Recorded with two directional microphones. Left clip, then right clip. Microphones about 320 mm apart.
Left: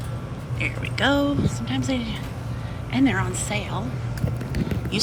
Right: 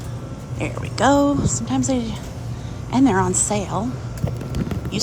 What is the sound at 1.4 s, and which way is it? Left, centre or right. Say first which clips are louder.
Speech: right 4 dB; centre.